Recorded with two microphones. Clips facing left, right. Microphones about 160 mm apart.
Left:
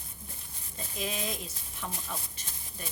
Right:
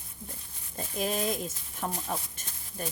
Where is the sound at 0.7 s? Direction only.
45° right (ahead or behind).